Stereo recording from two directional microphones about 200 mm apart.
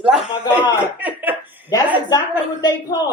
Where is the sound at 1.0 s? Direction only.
10° right (ahead or behind).